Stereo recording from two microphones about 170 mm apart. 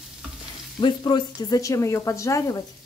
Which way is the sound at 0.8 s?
25° left (ahead or behind).